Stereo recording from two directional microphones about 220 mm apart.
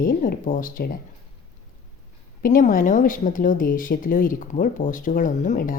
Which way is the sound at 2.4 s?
35° left (ahead or behind).